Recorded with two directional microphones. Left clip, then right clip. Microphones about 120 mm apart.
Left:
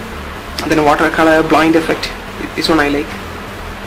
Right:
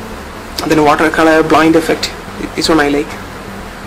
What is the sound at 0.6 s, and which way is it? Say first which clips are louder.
Speech: right 2 dB; 20° right (ahead or behind).